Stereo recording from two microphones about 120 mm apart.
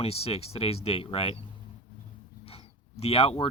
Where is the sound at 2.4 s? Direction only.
55° left (ahead or behind).